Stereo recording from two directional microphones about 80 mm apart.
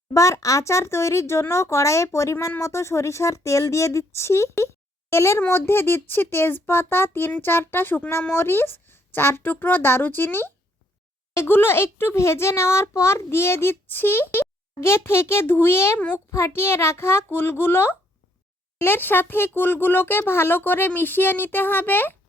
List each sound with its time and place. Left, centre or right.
0.1 s speech: left
16.0 s speech: centre
16.3 s speech: left